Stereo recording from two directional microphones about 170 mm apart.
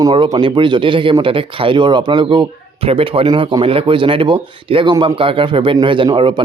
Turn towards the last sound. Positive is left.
turn(degrees=-30)  # may be behind; listen again after turning